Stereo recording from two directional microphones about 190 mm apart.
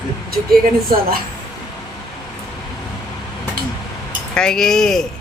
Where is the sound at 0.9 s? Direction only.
50° right (ahead or behind).